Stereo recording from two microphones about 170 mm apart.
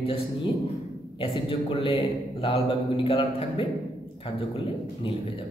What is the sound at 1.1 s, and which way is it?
A man's voice, 30° left (ahead or behind).